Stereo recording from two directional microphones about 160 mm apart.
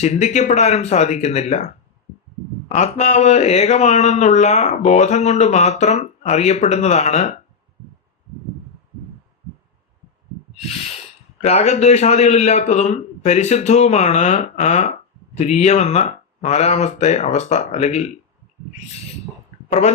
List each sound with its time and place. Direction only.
0.0 s speech: 45° left (ahead or behind)
11.4 s speech: 45° left (ahead or behind)